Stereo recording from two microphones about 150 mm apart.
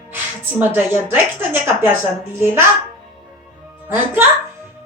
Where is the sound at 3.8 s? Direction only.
15° right (ahead or behind).